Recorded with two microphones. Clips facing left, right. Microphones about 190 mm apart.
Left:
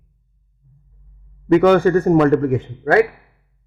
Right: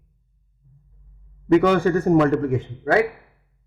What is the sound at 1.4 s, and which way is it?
Speech, 60° left (ahead or behind).